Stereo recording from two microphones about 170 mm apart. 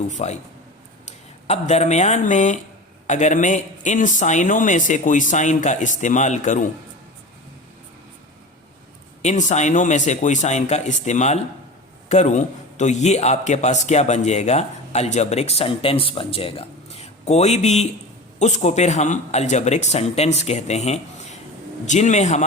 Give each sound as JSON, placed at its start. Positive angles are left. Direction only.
{"t": 0.1, "sound": "a man's voice", "side_deg": 45}
{"t": 9.2, "sound": "a man's voice", "side_deg": 45}